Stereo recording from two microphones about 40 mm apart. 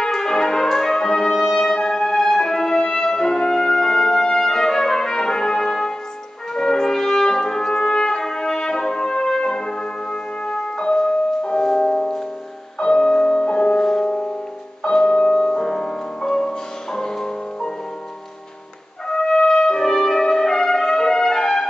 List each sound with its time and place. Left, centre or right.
0.0 s brass instrument: centre
1.3 s music: centre
6.5 s trumpet: centre
12.7 s music: centre
14.9 s music: centre
19.0 s trumpet: centre